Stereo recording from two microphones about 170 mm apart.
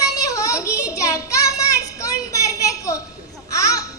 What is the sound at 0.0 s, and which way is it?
Child singing, 20° left (ahead or behind).